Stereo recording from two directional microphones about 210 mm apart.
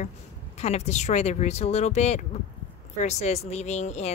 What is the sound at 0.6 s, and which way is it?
A woman's voice, 30° left (ahead or behind).